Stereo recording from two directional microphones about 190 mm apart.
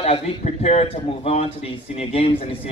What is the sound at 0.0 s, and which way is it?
A man's voice, 35° left (ahead or behind).